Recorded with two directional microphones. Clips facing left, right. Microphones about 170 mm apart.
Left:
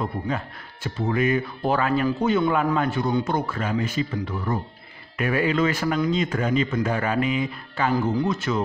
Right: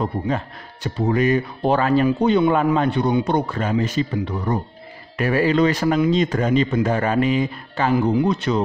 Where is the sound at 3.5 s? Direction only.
40° right (ahead or behind).